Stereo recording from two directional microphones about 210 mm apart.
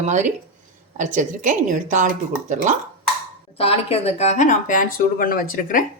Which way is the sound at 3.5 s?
30° left (ahead or behind).